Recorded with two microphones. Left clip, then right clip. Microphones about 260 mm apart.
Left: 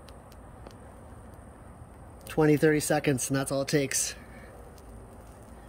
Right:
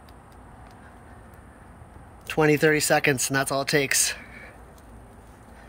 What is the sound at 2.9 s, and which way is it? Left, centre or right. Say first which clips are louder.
Speech: right 6 dB; centre.